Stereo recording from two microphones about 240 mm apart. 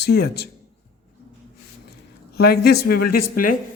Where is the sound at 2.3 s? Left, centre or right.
Left.